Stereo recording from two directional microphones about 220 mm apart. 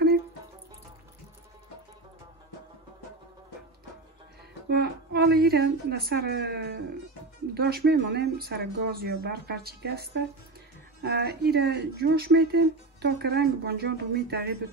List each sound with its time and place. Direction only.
4.6 s speech: 45° right (ahead or behind)